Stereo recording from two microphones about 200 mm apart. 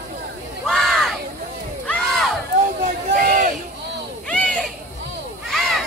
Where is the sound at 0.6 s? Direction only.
Centre (ahead or behind).